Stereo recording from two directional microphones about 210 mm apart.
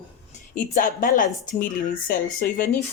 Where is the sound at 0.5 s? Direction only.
40° left (ahead or behind).